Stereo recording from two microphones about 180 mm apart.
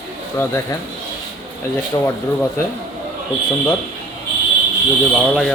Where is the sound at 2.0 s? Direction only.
15° left (ahead or behind).